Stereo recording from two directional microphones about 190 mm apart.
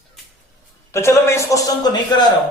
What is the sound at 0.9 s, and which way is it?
Speech, 15° left (ahead or behind).